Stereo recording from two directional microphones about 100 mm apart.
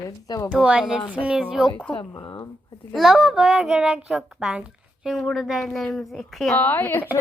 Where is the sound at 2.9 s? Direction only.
Centre (ahead or behind).